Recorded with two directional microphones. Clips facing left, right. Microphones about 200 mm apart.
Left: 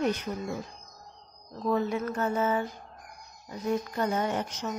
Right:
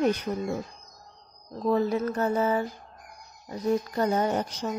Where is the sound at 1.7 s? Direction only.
35° right (ahead or behind).